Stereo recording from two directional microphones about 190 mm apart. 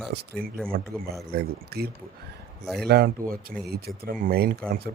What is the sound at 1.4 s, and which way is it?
Speech, 55° right (ahead or behind).